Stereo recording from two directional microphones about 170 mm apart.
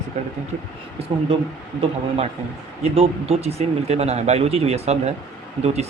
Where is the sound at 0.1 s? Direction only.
40° right (ahead or behind).